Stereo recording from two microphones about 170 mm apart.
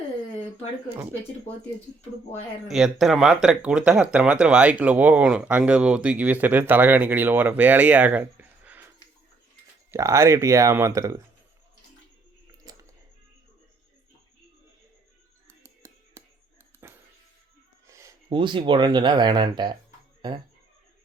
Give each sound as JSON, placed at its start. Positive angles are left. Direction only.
{"t": 2.6, "sound": "speech", "side_deg": 0}
{"t": 9.9, "sound": "speech", "side_deg": -15}
{"t": 15.6, "sound": "a sound", "side_deg": -15}
{"t": 16.8, "sound": "cat", "side_deg": -15}
{"t": 17.8, "sound": "speech", "side_deg": -20}